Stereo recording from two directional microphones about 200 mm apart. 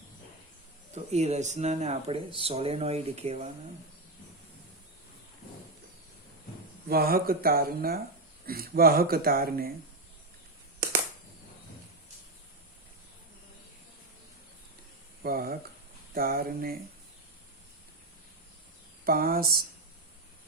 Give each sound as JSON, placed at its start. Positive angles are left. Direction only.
{"t": 1.1, "sound": "speech", "side_deg": -35}
{"t": 6.8, "sound": "speech", "side_deg": -50}
{"t": 15.2, "sound": "speech", "side_deg": -50}
{"t": 19.0, "sound": "speech", "side_deg": -45}